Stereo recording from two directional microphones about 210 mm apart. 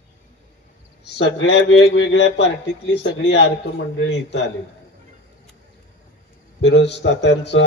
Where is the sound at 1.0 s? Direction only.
55° left (ahead or behind).